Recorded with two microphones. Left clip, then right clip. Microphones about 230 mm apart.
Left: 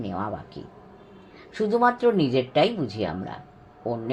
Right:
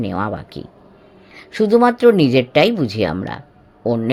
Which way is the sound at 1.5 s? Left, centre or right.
Right.